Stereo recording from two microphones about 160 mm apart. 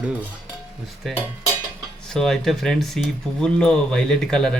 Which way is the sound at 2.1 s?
5° left (ahead or behind).